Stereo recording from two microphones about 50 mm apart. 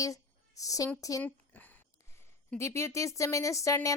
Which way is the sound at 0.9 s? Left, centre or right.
Left.